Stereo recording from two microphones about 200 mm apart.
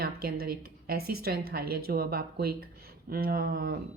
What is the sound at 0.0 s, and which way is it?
Speech, 50° right (ahead or behind).